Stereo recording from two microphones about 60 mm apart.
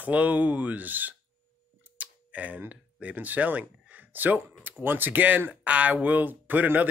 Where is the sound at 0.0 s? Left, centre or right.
Right.